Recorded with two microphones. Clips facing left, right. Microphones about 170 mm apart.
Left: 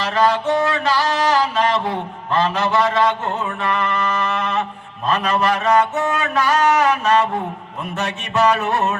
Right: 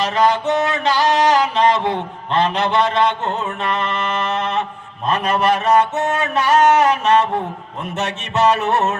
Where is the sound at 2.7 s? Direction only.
25° right (ahead or behind).